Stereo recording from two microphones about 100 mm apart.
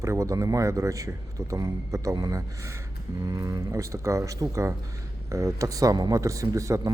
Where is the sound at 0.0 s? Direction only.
30° right (ahead or behind).